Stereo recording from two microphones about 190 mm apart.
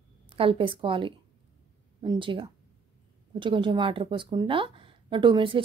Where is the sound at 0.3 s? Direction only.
30° right (ahead or behind).